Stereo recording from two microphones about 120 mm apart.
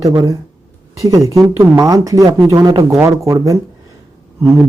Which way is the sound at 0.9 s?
30° right (ahead or behind).